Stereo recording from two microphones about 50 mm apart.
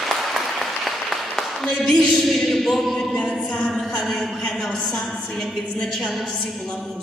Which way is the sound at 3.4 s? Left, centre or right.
Left.